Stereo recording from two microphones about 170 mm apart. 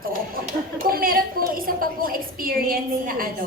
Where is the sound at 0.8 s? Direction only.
60° right (ahead or behind).